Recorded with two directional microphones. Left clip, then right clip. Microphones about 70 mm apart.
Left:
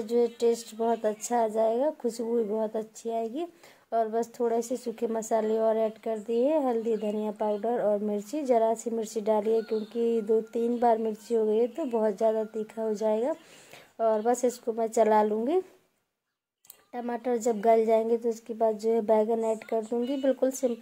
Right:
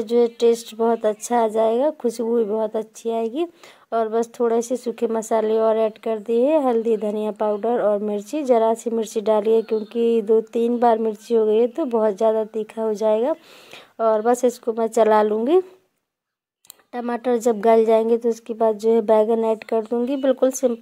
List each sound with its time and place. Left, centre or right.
0.0 s a woman's voice: right
16.9 s a woman's voice: right